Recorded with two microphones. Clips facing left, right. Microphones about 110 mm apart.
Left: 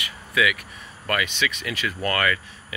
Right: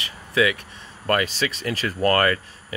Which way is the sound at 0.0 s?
30° right (ahead or behind).